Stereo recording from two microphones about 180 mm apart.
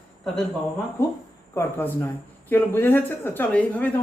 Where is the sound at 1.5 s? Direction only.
15° left (ahead or behind).